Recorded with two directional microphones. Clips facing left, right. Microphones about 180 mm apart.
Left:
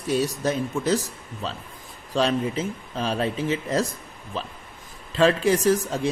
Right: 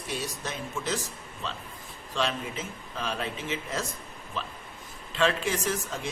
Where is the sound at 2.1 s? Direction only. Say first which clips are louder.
Left 8 dB; 40° left (ahead or behind).